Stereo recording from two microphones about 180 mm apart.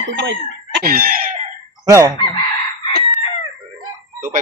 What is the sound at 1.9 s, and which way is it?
Chicken, 15° right (ahead or behind).